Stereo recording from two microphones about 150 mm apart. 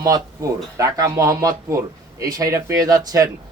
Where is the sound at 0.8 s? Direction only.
20° right (ahead or behind).